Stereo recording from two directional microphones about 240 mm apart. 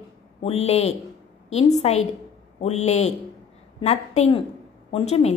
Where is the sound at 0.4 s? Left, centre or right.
Left.